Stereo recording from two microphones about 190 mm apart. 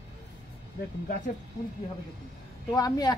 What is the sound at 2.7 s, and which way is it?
Speech, 20° left (ahead or behind).